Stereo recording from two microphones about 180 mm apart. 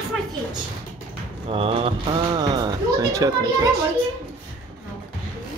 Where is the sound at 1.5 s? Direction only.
30° right (ahead or behind).